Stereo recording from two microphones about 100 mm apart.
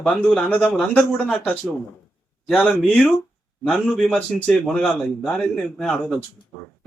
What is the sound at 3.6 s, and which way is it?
A man's voice, 5° left (ahead or behind).